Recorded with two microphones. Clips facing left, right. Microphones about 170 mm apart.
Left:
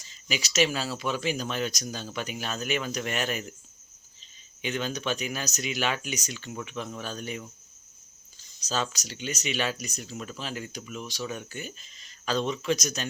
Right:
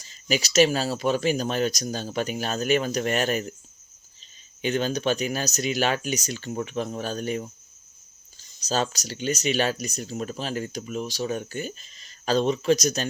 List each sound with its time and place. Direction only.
0.0 s speech: 40° right (ahead or behind)
4.6 s speech: 35° right (ahead or behind)
8.6 s speech: 35° right (ahead or behind)